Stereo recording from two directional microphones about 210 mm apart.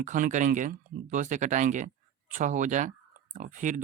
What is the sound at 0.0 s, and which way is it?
Speech, 35° right (ahead or behind).